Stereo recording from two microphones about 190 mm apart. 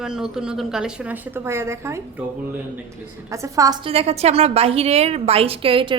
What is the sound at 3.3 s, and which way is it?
A woman's voice, 15° right (ahead or behind).